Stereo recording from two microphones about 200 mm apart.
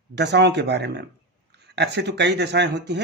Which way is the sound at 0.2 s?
60° right (ahead or behind).